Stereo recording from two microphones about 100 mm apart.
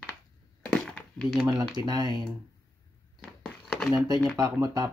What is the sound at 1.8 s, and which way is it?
Speech, 45° right (ahead or behind).